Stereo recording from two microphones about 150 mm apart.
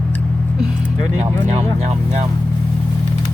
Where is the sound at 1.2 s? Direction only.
50° right (ahead or behind).